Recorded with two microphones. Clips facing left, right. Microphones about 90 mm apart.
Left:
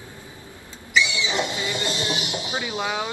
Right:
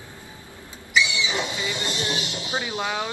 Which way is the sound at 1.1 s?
20° right (ahead or behind).